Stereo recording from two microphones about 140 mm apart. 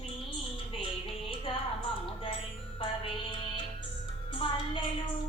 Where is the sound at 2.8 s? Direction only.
35° left (ahead or behind).